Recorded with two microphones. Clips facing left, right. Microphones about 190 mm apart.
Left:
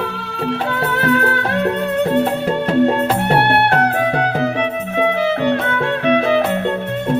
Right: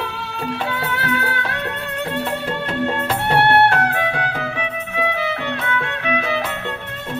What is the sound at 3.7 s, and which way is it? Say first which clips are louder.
Music: left 4 dB; 40° left (ahead or behind).